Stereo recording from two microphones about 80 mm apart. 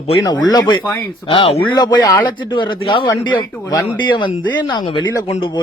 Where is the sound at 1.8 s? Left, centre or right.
Left.